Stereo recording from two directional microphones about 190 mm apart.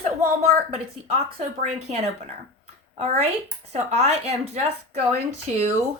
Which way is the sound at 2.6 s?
35° right (ahead or behind).